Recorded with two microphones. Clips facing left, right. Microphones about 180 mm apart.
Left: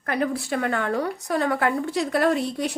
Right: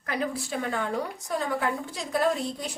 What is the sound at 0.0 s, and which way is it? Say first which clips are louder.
A woman's voice: left 5 dB; 60° left (ahead or behind).